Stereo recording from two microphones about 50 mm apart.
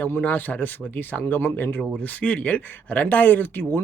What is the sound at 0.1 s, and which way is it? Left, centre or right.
Speech, left.